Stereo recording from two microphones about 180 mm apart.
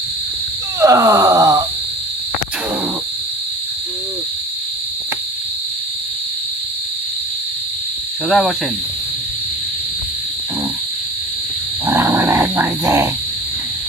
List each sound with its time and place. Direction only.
0.8 s wail: 20° right (ahead or behind)
8.3 s snake: centre (ahead or behind)
11.9 s dog: 15° right (ahead or behind)